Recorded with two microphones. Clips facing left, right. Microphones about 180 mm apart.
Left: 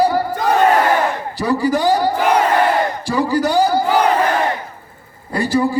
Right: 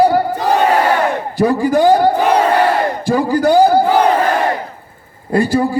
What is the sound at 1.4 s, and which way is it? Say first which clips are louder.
Speech: right 5 dB; 50° right (ahead or behind).